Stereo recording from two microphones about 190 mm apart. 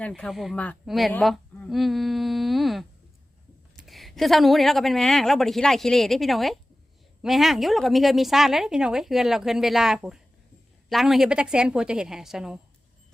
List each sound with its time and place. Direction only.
0.0 s a woman's voice: 5° left (ahead or behind)